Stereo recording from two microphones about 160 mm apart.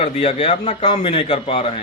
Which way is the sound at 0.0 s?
40° left (ahead or behind).